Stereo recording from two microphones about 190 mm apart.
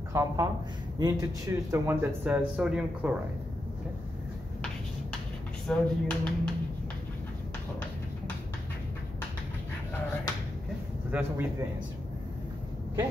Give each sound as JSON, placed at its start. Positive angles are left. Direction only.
{"t": 0.1, "sound": "speech", "side_deg": -15}
{"t": 5.7, "sound": "speech", "side_deg": 5}
{"t": 11.1, "sound": "a man's voice", "side_deg": -10}